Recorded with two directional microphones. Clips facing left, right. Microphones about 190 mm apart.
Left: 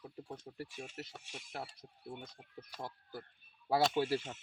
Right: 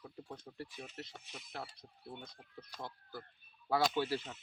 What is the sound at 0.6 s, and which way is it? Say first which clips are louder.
Speech: left 1 dB; 10° left (ahead or behind).